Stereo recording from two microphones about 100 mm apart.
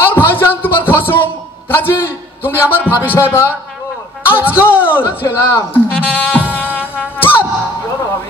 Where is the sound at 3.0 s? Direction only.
20° left (ahead or behind).